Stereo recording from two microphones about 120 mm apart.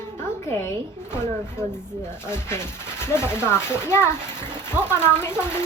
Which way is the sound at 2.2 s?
20° left (ahead or behind).